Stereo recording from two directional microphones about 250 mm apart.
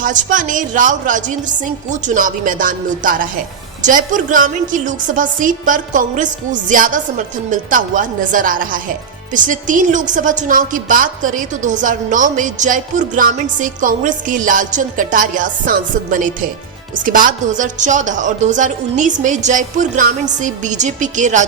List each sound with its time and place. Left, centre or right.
0.0 s a woman's voice: right